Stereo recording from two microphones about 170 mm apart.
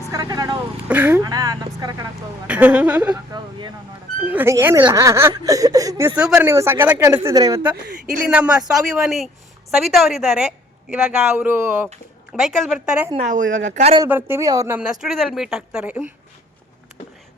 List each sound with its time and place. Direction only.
0.1 s speech: 20° right (ahead or behind)
0.9 s speech: 10° right (ahead or behind)
1.2 s speech: 20° right (ahead or behind)
2.5 s speech: 10° right (ahead or behind)
4.2 s speech: 10° right (ahead or behind)
7.9 s speech: 50° right (ahead or behind)
8.3 s a woman's voice: 5° right (ahead or behind)
12.3 s a woman's voice: centre (ahead or behind)
13.1 s speech: 45° right (ahead or behind)
14.1 s speech: 15° right (ahead or behind)
14.8 s a woman's voice: 5° right (ahead or behind)